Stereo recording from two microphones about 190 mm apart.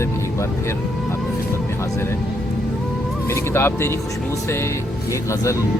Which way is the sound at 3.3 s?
15° left (ahead or behind).